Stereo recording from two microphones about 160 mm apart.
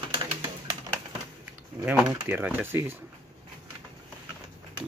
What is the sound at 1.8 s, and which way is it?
Speech, 10° right (ahead or behind).